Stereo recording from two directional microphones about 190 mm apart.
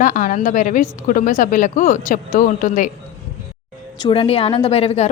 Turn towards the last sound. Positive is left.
turn(degrees=35)  # may be behind; listen again after turning